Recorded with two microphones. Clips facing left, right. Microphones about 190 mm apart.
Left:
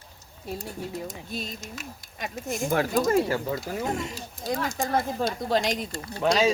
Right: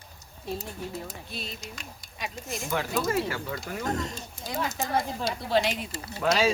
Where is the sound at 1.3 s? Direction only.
45° left (ahead or behind).